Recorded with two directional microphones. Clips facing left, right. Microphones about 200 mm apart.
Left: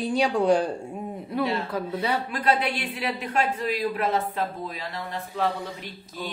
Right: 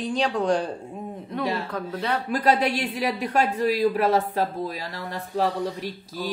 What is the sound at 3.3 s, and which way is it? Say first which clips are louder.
Speech: right 4 dB; 40° right (ahead or behind).